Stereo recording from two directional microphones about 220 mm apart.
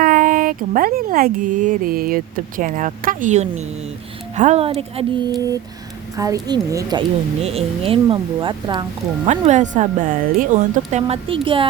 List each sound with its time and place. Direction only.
0.0 s speech: 40° right (ahead or behind)
6.1 s a woman's voice: 15° right (ahead or behind)
9.2 s speech: 30° right (ahead or behind)